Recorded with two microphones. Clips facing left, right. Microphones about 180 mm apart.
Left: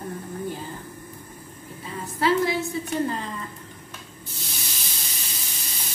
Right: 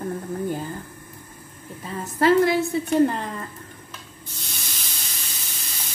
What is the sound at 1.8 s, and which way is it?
Speech, 45° right (ahead or behind).